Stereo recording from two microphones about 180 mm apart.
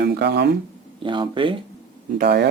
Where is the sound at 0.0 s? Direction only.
65° right (ahead or behind).